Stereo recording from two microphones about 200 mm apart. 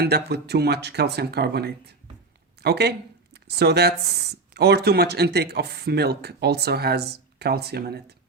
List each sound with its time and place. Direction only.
0.0 s speech: 55° right (ahead or behind)